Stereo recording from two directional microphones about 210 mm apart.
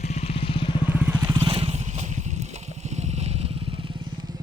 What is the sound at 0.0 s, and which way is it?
Vehicle, 30° left (ahead or behind).